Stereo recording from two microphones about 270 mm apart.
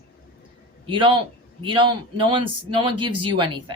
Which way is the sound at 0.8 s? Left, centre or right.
Centre.